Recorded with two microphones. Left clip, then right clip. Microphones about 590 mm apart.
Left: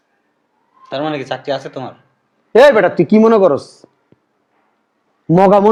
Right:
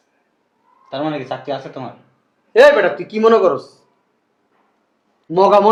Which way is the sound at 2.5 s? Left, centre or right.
Left.